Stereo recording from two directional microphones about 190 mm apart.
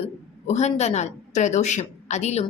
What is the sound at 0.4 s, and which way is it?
A woman's voice, 35° left (ahead or behind).